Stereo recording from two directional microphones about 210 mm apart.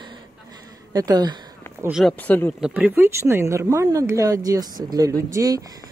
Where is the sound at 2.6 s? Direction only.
5° right (ahead or behind).